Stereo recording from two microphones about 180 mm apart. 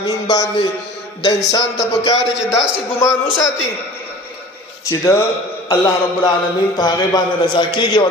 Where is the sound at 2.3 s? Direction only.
5° right (ahead or behind).